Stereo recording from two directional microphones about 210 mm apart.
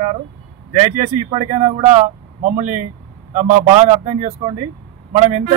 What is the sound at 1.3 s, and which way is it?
A man's voice, 35° right (ahead or behind).